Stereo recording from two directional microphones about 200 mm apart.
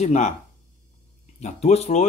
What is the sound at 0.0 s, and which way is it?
Speech, 35° left (ahead or behind).